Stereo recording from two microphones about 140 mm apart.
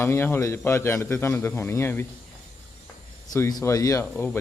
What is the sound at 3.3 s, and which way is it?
A man's voice, 25° left (ahead or behind).